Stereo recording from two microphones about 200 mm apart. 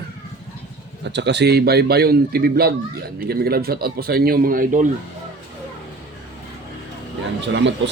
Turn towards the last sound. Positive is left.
turn(degrees=-65)  # may be behind; listen again after turning